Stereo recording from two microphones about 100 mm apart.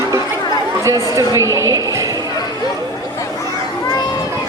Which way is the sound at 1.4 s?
30° right (ahead or behind).